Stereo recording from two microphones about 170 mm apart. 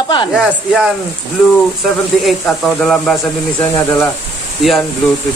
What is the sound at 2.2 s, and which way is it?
Speech, centre (ahead or behind).